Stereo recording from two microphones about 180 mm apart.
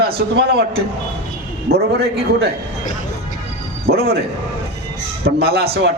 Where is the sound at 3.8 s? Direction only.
60° right (ahead or behind).